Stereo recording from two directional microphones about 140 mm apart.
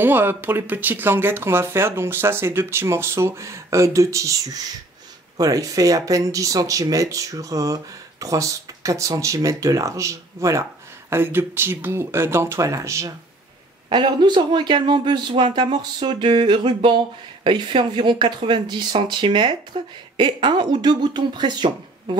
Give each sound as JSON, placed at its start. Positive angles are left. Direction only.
{"t": 0.0, "sound": "speech", "side_deg": -15}
{"t": 5.4, "sound": "speech", "side_deg": -25}
{"t": 13.8, "sound": "speech", "side_deg": -35}